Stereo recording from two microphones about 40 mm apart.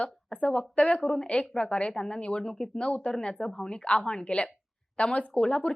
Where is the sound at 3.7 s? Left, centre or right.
Left.